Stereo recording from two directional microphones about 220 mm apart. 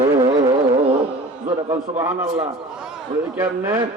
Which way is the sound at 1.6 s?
15° right (ahead or behind).